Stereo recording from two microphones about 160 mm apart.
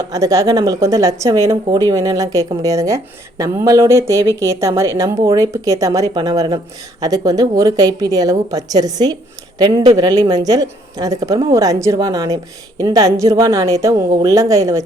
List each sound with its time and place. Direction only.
0.1 s a woman's voice: 20° right (ahead or behind)